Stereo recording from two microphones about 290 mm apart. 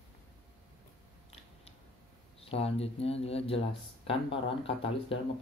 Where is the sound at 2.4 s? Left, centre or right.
Centre.